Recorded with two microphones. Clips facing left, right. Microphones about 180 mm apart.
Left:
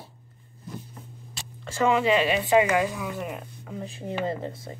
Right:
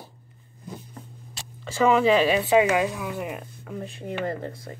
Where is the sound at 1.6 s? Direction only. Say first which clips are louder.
Right 3 dB; centre (ahead or behind).